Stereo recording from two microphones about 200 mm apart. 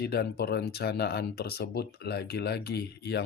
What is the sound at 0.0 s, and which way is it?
Speech, 50° left (ahead or behind).